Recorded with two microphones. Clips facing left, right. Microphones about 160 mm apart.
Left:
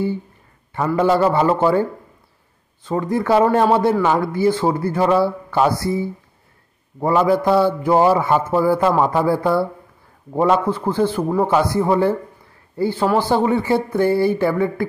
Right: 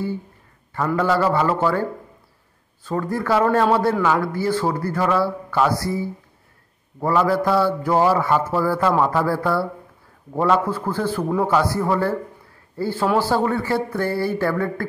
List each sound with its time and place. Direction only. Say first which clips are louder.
0.7 s a man's voice: left 3 dB; 20° left (ahead or behind)
4.0 s a man's voice: left 3 dB; 20° left (ahead or behind)